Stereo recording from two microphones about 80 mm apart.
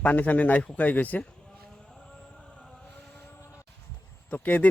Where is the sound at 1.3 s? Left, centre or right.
Centre.